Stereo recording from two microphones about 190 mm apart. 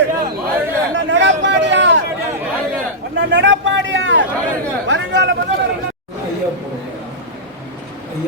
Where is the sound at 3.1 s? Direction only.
75° right (ahead or behind).